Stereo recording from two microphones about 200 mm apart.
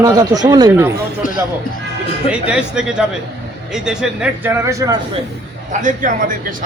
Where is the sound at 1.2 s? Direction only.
40° left (ahead or behind).